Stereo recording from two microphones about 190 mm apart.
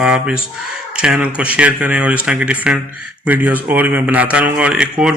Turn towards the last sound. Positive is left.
turn(degrees=-5)  # may be behind; listen again after turning